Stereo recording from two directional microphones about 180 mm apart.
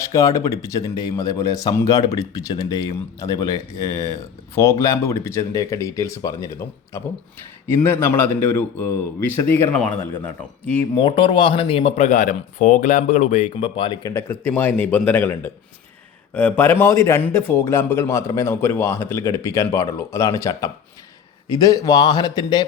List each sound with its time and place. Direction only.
0.0 s a man's voice: 15° left (ahead or behind)
7.7 s a man's voice: 15° left (ahead or behind)
10.9 s a man's voice: 30° left (ahead or behind)